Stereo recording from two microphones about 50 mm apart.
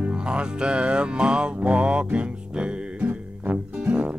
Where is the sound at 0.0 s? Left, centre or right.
Centre.